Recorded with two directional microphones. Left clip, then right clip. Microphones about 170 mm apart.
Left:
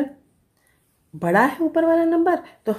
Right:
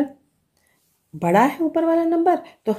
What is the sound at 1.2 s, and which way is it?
A woman's voice, 25° right (ahead or behind).